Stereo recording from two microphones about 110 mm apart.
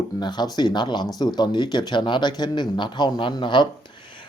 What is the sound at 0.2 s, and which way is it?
Speech, 40° left (ahead or behind).